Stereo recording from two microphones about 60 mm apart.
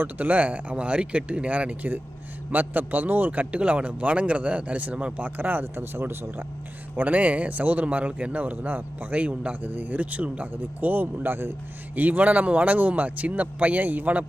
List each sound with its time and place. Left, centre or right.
0.0 s a man's voice: right
6.9 s a man's voice: right